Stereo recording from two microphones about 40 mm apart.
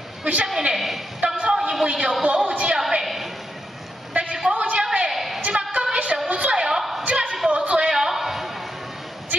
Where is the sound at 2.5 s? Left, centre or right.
Right.